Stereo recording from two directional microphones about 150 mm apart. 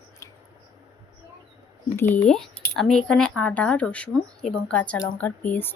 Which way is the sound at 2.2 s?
5° left (ahead or behind).